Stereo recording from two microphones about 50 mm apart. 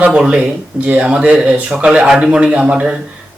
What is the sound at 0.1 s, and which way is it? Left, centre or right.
A man's voice, centre.